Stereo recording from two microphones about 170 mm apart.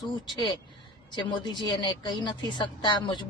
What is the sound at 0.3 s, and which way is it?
A woman's voice, 25° left (ahead or behind).